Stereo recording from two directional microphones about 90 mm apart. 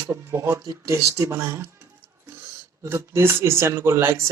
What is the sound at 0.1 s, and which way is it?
Speech, 25° right (ahead or behind).